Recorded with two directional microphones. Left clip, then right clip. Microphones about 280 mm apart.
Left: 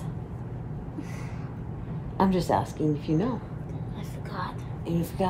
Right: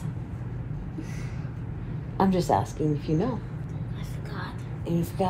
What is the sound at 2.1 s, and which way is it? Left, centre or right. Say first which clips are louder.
A woman's voice: right 1 dB; centre.